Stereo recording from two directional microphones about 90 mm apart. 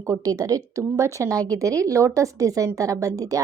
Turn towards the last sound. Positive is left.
turn(degrees=-40)  # may be behind; listen again after turning